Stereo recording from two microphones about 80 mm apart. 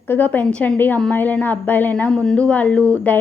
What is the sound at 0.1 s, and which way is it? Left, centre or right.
Speech, left.